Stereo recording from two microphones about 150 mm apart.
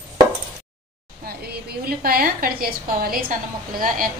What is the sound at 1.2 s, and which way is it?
A woman's voice, 90° right.